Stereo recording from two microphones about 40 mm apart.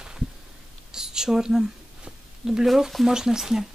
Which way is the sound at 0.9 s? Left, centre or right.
Centre.